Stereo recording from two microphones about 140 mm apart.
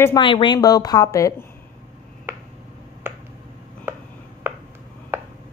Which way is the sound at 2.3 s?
20° right (ahead or behind).